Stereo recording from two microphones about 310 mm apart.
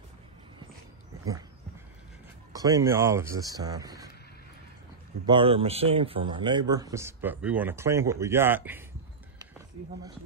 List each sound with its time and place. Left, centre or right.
2.5 s a man's voice: centre
5.2 s a man's voice: centre